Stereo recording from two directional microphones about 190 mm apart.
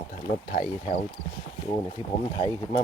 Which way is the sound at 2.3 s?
25° left (ahead or behind).